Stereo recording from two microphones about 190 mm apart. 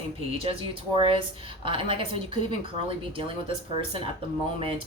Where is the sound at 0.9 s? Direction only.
25° right (ahead or behind).